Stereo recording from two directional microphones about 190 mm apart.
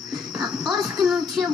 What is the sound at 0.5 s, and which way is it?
Speech, centre (ahead or behind).